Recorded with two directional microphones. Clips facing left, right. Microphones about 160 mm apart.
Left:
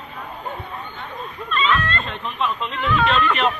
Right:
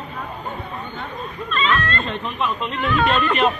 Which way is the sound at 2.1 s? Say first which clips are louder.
Right 1 dB; 5° right (ahead or behind).